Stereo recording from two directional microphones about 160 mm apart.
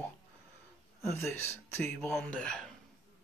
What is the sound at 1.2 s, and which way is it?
Speech, 15° left (ahead or behind).